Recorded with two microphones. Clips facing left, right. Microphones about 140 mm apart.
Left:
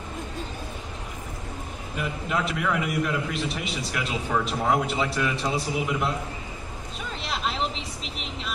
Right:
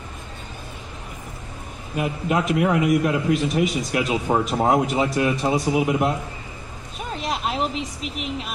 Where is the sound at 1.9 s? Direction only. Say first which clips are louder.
Right 6 dB; 50° right (ahead or behind).